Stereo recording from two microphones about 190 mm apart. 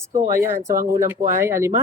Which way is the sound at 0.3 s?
15° right (ahead or behind).